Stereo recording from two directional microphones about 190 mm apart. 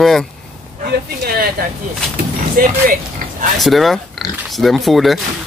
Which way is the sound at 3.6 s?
Centre (ahead or behind).